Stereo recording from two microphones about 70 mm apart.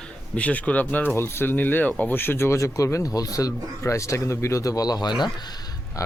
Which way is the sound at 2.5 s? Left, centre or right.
Left.